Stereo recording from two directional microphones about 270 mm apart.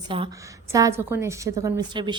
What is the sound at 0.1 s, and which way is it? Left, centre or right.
A woman's voice, centre.